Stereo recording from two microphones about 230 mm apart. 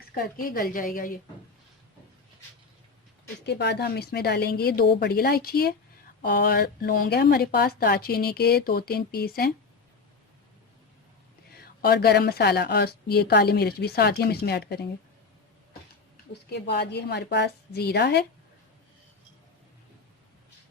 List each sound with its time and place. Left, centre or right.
0.4 s a woman's voice: left
3.4 s a woman's voice: left
11.5 s a woman's voice: left
16.3 s a woman's voice: left